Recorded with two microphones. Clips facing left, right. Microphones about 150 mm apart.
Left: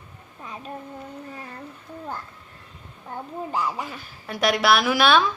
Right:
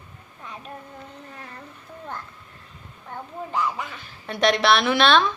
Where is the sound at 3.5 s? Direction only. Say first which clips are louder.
Right 1 dB; 35° left (ahead or behind).